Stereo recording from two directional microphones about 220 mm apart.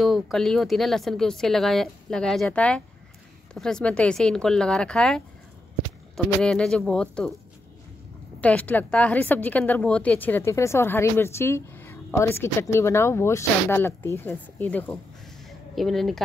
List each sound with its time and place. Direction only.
0.0 s speech: centre (ahead or behind)
8.4 s a woman's voice: 5° left (ahead or behind)
15.4 s a sound: centre (ahead or behind)